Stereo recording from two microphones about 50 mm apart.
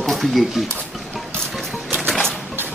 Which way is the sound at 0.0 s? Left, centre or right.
Centre.